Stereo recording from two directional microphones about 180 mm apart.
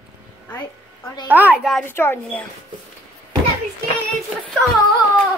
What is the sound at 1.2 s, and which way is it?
Speech, 10° right (ahead or behind).